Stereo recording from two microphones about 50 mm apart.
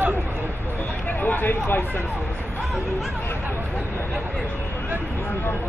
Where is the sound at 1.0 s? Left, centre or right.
Left.